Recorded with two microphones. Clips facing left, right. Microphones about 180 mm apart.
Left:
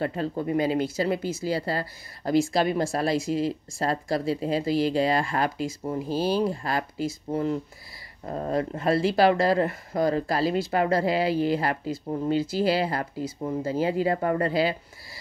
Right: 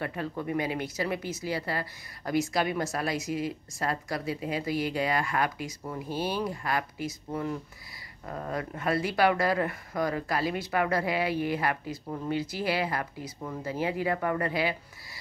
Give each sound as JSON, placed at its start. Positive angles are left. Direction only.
{"t": 0.0, "sound": "a woman's voice", "side_deg": 30}